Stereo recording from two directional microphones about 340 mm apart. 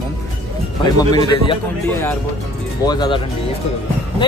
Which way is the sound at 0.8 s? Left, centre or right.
Centre.